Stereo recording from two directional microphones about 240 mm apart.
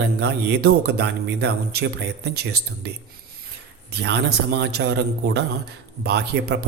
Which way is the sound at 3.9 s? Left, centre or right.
Right.